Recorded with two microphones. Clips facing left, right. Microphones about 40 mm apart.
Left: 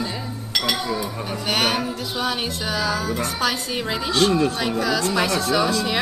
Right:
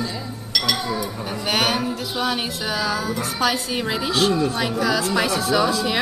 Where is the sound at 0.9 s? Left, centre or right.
Centre.